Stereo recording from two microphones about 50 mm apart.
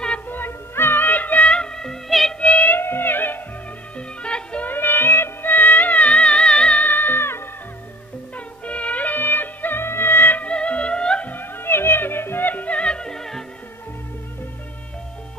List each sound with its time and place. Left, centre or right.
0.3 s music: left
1.5 s music: centre
2.4 s music: left
2.8 s music: left
4.2 s music: left
4.6 s music: left; by 6.8 s centre
6.8 s music: left
8.6 s music: left
10.4 s music: left
11.2 s music: left; by 13.4 s centre